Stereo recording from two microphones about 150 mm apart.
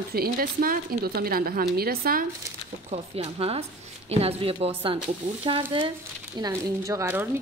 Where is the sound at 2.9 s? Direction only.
40° right (ahead or behind).